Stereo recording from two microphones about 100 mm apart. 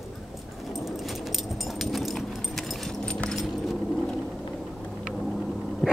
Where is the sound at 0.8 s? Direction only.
Centre (ahead or behind).